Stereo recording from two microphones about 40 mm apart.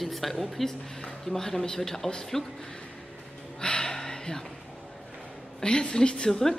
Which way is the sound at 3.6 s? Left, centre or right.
Centre.